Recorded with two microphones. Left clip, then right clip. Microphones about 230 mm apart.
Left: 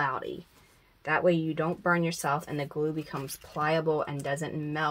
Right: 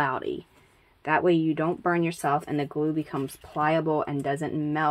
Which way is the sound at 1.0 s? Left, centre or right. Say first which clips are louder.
Right 3 dB; right.